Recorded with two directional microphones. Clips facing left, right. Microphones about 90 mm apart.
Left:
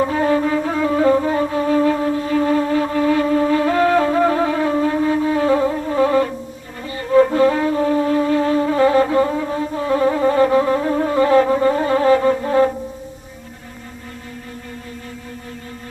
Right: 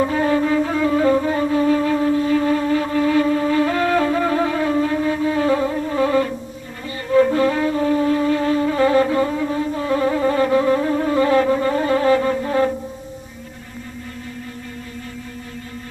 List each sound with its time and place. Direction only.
0.1 s flute: 35° left (ahead or behind)
7.1 s music: 30° left (ahead or behind)